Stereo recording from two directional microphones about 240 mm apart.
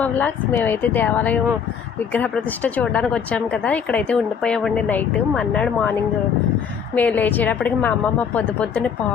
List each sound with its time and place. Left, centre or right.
0.0 s a woman's voice: centre
6.9 s a woman's voice: centre